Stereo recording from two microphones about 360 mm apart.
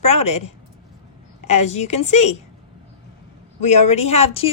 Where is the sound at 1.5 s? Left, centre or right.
Centre.